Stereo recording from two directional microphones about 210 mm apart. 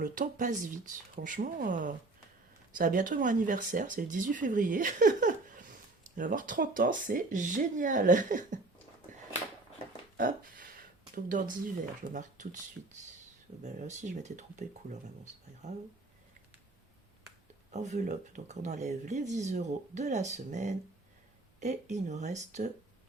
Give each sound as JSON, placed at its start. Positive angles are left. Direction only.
{"t": 0.0, "sound": "speech", "side_deg": -40}
{"t": 10.2, "sound": "a sound", "side_deg": -40}
{"t": 11.1, "sound": "speech", "side_deg": -40}
{"t": 13.6, "sound": "speech", "side_deg": -35}
{"t": 17.7, "sound": "speech", "side_deg": -35}